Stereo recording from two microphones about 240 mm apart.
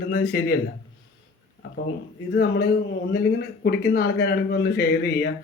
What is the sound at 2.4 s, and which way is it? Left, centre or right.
Speech, left.